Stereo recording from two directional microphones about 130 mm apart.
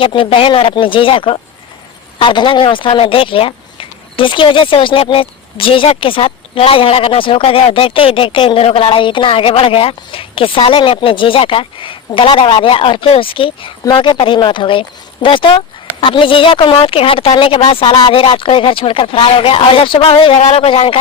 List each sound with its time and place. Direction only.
0.0 s speech: 45° left (ahead or behind)